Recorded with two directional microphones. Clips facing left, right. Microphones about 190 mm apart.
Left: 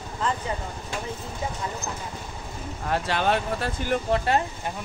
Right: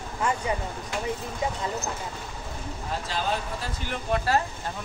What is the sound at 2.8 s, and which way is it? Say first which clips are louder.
Speech: left 6 dB; 70° left (ahead or behind).